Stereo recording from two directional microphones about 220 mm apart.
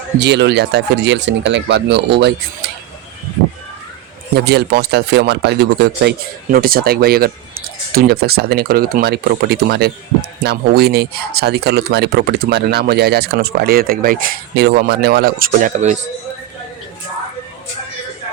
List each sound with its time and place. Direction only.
0.2 s speech: 50° right (ahead or behind)
4.4 s speech: 45° right (ahead or behind)